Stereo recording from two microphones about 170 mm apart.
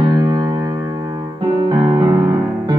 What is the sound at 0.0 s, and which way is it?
Music, 25° right (ahead or behind).